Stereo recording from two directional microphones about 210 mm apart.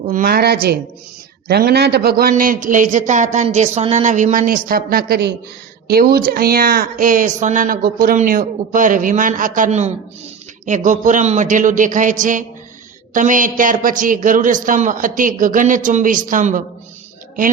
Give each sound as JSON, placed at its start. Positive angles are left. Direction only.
{"t": 0.0, "sound": "a woman's voice", "side_deg": -40}